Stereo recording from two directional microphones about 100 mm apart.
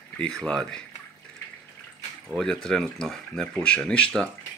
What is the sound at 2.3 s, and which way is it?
Speech, 5° left (ahead or behind).